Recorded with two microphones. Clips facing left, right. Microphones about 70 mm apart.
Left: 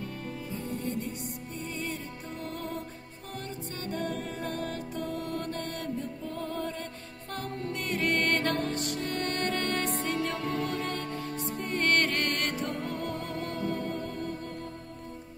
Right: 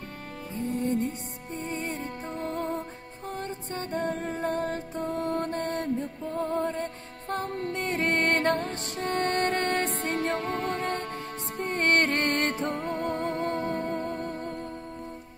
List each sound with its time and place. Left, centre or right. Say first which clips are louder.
0.7 s music: right 8 dB; right